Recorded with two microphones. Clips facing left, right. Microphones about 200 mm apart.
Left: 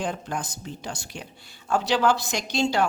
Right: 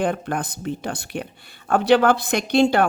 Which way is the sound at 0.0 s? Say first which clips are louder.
Right 6 dB; 60° right (ahead or behind).